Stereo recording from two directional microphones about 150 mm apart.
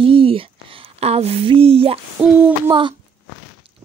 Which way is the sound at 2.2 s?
5° right (ahead or behind).